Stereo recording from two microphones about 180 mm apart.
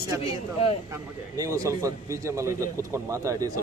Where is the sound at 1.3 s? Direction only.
20° right (ahead or behind).